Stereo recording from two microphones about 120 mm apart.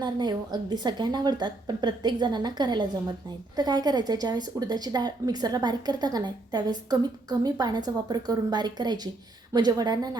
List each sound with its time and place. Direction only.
0.0 s a woman's voice: 40° right (ahead or behind)